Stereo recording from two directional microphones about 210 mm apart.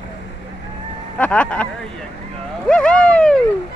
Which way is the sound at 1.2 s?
5° left (ahead or behind).